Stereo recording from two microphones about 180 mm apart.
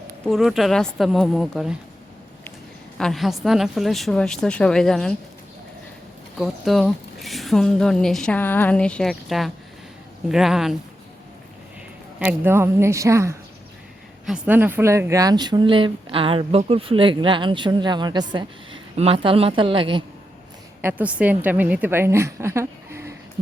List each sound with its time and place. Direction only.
0.3 s a woman's voice: centre (ahead or behind)
3.0 s a woman's voice: centre (ahead or behind)
6.4 s a woman's voice: centre (ahead or behind)
12.2 s a woman's voice: 10° right (ahead or behind); by 20.1 s 30° right (ahead or behind)
20.8 s a woman's voice: 10° right (ahead or behind)